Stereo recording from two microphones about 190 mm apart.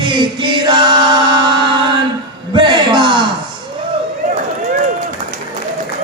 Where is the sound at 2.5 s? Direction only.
25° right (ahead or behind).